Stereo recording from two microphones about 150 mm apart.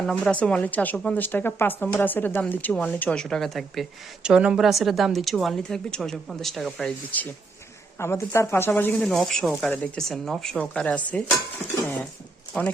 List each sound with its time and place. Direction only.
0.0 s a woman's voice: 5° left (ahead or behind)
9.0 s a woman's voice: centre (ahead or behind)